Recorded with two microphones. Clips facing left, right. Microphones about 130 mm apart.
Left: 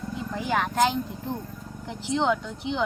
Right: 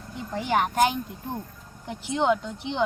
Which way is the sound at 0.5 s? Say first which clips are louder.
Right 1 dB; 15° right (ahead or behind).